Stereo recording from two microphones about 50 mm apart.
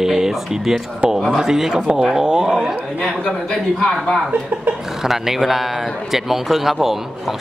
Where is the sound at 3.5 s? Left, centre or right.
Centre.